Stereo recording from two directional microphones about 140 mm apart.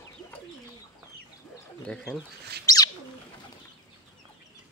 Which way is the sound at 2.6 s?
25° left (ahead or behind).